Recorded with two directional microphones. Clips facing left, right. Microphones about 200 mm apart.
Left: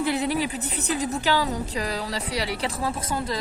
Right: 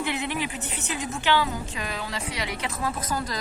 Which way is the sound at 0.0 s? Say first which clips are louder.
Left 5 dB; 35° left (ahead or behind).